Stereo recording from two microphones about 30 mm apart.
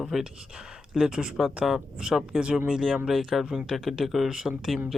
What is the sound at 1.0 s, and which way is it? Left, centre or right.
Speech, right.